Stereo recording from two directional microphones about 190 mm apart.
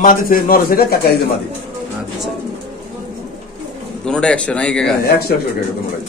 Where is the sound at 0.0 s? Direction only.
45° left (ahead or behind).